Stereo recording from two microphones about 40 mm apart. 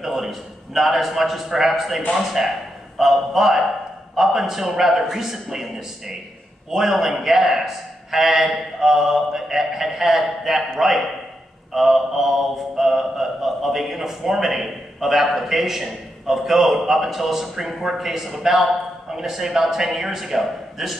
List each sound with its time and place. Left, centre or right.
0.0 s a man's voice: centre